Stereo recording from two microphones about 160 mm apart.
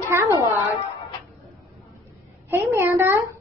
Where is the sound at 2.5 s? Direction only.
10° right (ahead or behind).